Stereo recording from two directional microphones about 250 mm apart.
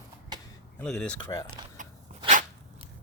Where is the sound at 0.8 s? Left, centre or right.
Centre.